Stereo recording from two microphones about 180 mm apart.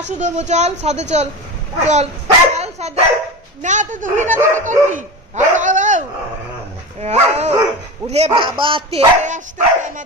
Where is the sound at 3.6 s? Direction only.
45° right (ahead or behind).